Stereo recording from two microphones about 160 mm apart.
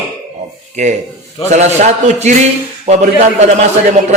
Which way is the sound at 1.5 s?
45° right (ahead or behind).